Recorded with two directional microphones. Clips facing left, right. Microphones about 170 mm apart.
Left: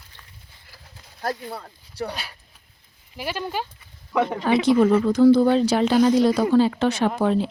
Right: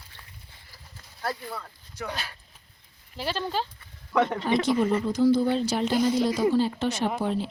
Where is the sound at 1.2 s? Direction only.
35° left (ahead or behind).